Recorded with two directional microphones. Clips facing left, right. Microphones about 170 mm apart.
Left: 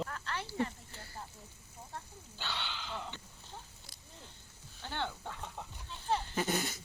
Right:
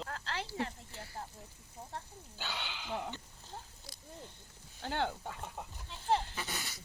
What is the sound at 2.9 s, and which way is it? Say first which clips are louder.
Speech: right 4 dB; 45° right (ahead or behind).